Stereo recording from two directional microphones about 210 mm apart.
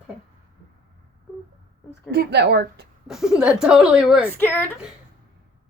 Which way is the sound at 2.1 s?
50° right (ahead or behind).